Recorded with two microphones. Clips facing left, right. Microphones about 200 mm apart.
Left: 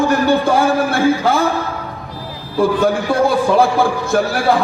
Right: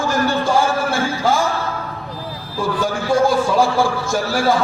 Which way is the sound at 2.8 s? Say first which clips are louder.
Left 2 dB; 60° left (ahead or behind).